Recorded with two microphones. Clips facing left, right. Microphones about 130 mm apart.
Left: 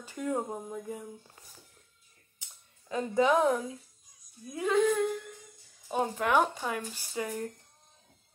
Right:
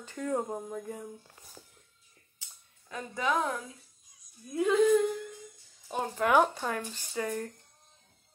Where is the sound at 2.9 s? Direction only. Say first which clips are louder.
Left 6 dB; 25° left (ahead or behind).